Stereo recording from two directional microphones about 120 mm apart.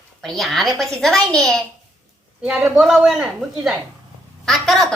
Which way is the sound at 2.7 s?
5° right (ahead or behind).